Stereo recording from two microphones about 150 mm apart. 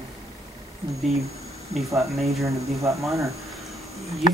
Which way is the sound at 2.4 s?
20° right (ahead or behind).